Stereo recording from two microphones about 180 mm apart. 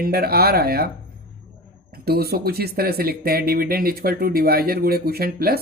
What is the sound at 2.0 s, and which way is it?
Speech, 60° right (ahead or behind).